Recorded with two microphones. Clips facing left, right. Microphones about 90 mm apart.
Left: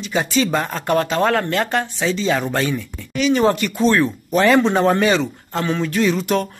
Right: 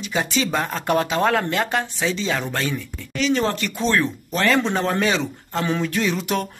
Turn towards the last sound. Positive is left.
turn(degrees=0)  # may be behind; listen again after turning